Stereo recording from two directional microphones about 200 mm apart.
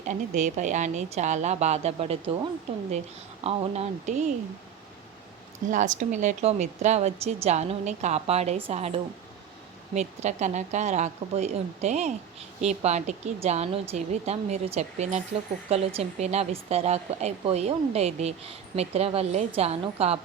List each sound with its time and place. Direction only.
0.0 s speech: 35° right (ahead or behind)
5.7 s speech: 40° right (ahead or behind)